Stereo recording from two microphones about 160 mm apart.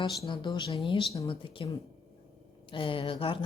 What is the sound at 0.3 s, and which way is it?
Speech, 30° left (ahead or behind).